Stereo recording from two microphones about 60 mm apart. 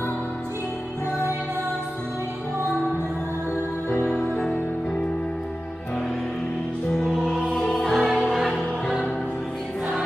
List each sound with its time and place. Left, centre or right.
3.9 s music: left
7.2 s music: centre